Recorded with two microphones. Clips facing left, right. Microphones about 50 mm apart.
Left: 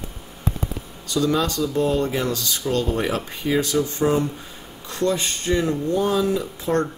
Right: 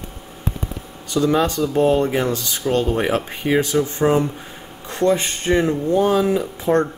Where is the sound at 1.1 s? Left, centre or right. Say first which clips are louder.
Right 3 dB; right.